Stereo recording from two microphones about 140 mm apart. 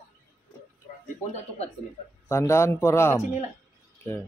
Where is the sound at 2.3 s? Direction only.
20° left (ahead or behind).